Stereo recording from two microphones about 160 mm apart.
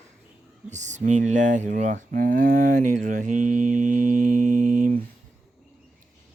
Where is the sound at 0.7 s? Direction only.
50° right (ahead or behind).